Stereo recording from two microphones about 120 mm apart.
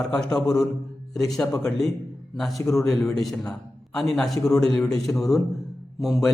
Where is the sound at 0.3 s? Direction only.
30° left (ahead or behind).